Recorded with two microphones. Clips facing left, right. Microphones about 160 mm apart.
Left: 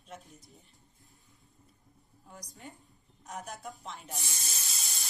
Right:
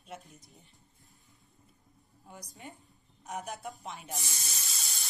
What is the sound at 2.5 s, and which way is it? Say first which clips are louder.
Speech: right 1 dB; centre (ahead or behind).